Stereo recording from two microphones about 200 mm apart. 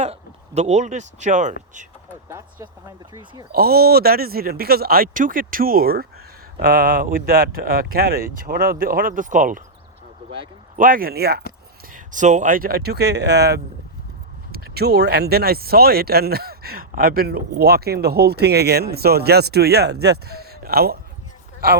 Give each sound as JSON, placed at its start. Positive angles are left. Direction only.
{"t": 0.0, "sound": "speech", "side_deg": -35}
{"t": 3.1, "sound": "speech", "side_deg": -20}
{"t": 3.5, "sound": "speech", "side_deg": -50}
{"t": 10.8, "sound": "speech", "side_deg": -45}
{"t": 11.9, "sound": "speech", "side_deg": -40}